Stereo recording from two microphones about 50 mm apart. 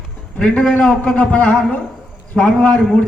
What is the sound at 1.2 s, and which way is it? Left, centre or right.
Speech, left.